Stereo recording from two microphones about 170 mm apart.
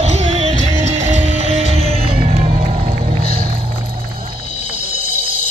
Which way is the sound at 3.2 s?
60° right (ahead or behind).